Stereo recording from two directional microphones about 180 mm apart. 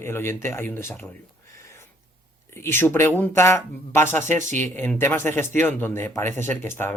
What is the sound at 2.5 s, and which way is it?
Speech, 15° left (ahead or behind).